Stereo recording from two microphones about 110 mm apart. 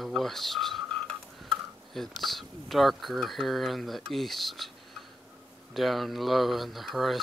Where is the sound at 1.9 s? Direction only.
Centre (ahead or behind).